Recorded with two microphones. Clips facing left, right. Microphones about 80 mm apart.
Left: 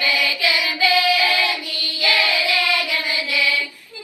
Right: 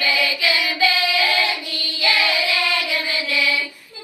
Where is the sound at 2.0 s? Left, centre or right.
Right.